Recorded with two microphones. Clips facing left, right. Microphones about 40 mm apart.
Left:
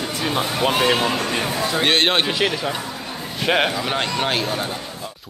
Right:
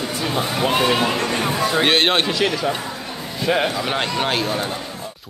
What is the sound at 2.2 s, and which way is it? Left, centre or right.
Speech, centre.